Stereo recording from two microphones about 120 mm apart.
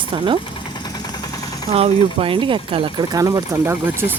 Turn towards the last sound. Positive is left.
turn(degrees=-20)  # may be behind; listen again after turning